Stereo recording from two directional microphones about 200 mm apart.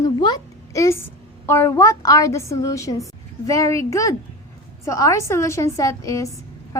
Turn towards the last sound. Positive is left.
turn(degrees=15)  # may be behind; listen again after turning